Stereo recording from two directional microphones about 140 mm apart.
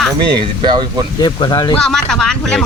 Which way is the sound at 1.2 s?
30° left (ahead or behind).